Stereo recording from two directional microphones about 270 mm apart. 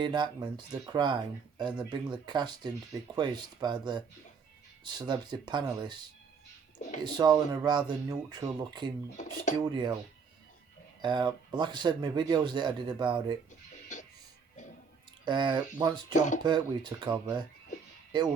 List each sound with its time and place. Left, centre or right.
0.0 s speech: centre
7.0 s speech: centre
9.1 s speech: left
9.6 s speech: centre
11.0 s speech: centre
15.2 s speech: centre
16.1 s speech: left
16.4 s speech: centre